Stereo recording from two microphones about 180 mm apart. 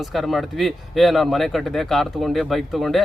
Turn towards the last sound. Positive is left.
turn(degrees=0)  # may be behind; listen again after turning